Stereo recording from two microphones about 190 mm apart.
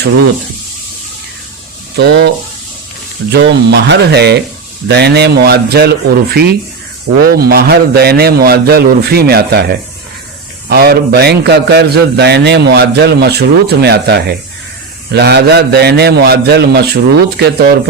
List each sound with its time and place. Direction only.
2.0 s a man's voice: 60° right (ahead or behind)
3.3 s a man's voice: 60° right (ahead or behind)